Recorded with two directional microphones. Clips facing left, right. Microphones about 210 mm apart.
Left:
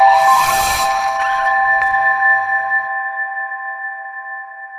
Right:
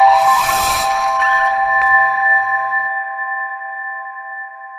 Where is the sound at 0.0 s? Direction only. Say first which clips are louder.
Even; centre (ahead or behind).